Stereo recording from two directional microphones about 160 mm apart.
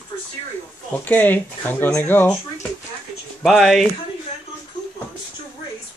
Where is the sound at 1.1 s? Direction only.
10° left (ahead or behind).